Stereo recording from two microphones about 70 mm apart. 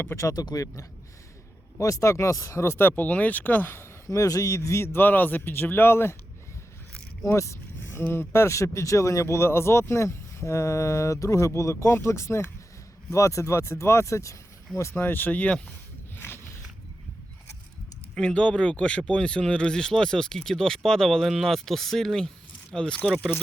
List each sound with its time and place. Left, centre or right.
0.3 s speech: left
4.1 s speech: left
7.3 s a sound: left
8.0 s speech: left
8.3 s speech: left
16.1 s a sound: left
18.1 s speech: centre